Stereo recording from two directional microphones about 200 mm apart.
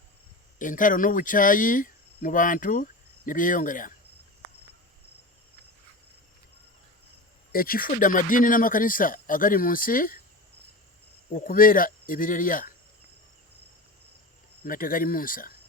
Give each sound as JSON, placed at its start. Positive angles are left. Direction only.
{"t": 0.6, "sound": "speech", "side_deg": 40}
{"t": 7.5, "sound": "speech", "side_deg": 45}
{"t": 11.3, "sound": "speech", "side_deg": 45}
{"t": 14.6, "sound": "speech", "side_deg": 45}